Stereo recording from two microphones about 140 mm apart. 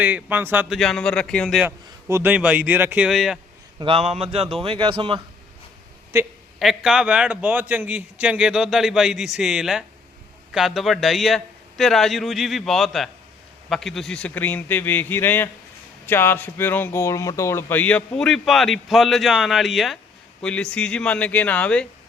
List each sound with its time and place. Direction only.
0.0 s speech: 10° right (ahead or behind)
0.7 s a man's voice: 5° left (ahead or behind)
1.6 s speech: 15° right (ahead or behind)
3.1 s a man's voice: centre (ahead or behind)
3.8 s speech: 45° right (ahead or behind)
6.1 s a woman's voice: 20° right (ahead or behind)
6.6 s a man's voice: centre (ahead or behind)